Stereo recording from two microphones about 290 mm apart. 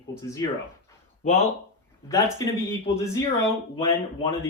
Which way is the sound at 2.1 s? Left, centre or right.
Centre.